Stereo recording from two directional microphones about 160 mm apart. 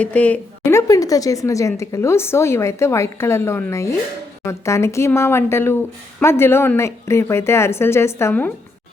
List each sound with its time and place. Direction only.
0.0 s a woman's voice: 10° left (ahead or behind)